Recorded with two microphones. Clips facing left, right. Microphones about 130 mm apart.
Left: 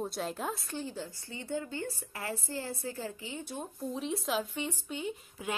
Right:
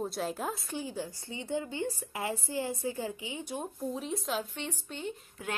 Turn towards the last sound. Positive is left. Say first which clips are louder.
# left 1 dB
turn(degrees=5)  # may be behind; listen again after turning